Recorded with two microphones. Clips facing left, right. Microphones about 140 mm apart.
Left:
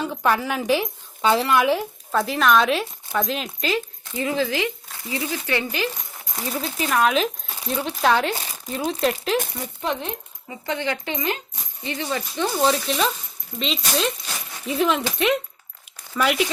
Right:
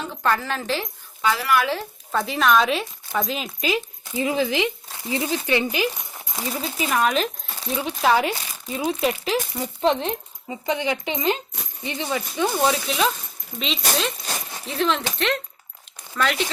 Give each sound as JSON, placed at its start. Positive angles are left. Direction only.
{"t": 0.0, "sound": "a woman's voice", "side_deg": 10}
{"t": 1.2, "sound": "speech", "side_deg": 25}
{"t": 2.1, "sound": "speech", "side_deg": 0}
{"t": 3.7, "sound": "speech", "side_deg": -15}
{"t": 6.3, "sound": "speech", "side_deg": 0}
{"t": 9.8, "sound": "speech", "side_deg": -25}
{"t": 12.1, "sound": "speech", "side_deg": -5}
{"t": 16.1, "sound": "a woman's voice", "side_deg": 10}